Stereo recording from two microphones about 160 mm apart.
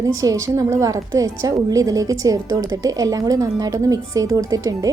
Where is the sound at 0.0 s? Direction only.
20° right (ahead or behind).